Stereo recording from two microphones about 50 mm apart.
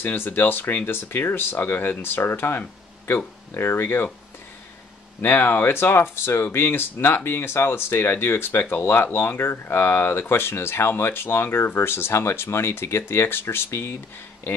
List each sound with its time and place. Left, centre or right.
0.0 s speech: left
5.2 s speech: left